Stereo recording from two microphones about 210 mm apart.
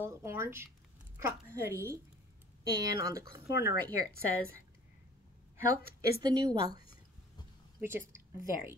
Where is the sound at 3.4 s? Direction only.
50° left (ahead or behind).